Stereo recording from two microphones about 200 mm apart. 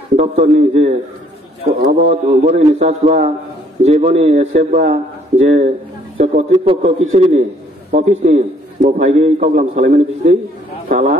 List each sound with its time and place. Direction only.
0.1 s a man's voice: 35° right (ahead or behind)
2.0 s a man's voice: 35° right (ahead or behind)